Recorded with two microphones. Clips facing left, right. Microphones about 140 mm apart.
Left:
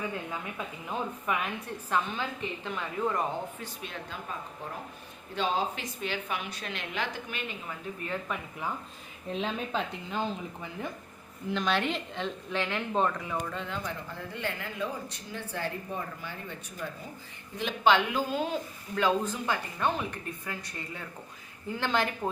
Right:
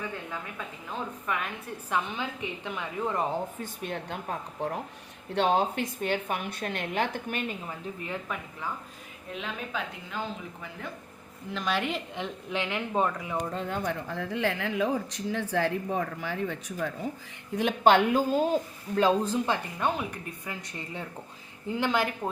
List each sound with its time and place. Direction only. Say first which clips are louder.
0.3 s a woman's voice: left 1 dB; 15° left (ahead or behind)
1.9 s a woman's voice: even; 15° right (ahead or behind)
3.6 s a woman's voice: right 5 dB; 55° right (ahead or behind)
8.3 s speech: even; centre (ahead or behind)
9.3 s a woman's voice: left 4 dB; 30° left (ahead or behind)
11.5 s a woman's voice: left 1 dB; 5° right (ahead or behind)
13.5 s speech: right 5 dB; 45° right (ahead or behind); by 16.7 s 90° right
17.6 s speech: right 4 dB; 50° right (ahead or behind); by 19.5 s 30° right (ahead or behind)
19.8 s a woman's voice: right 1 dB; 10° right (ahead or behind)